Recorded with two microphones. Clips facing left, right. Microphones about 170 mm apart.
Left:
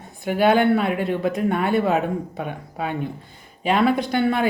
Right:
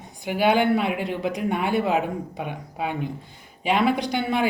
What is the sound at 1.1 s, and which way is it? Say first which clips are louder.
Speech: left 4 dB; 10° right (ahead or behind).